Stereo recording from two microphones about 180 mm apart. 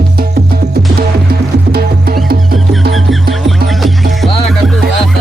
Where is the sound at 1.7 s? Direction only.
55° right (ahead or behind).